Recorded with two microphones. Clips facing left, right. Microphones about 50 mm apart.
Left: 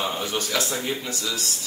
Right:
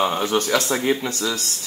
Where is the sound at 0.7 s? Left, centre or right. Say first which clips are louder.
Right 7 dB; right.